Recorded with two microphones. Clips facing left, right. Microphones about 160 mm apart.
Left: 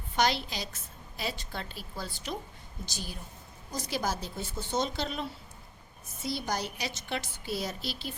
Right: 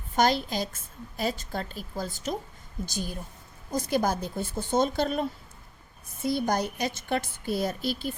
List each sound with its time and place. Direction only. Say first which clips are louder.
0.2 s a woman's voice: right 5 dB; 45° right (ahead or behind)
6.2 s a woman's voice: right 7 dB; 50° right (ahead or behind)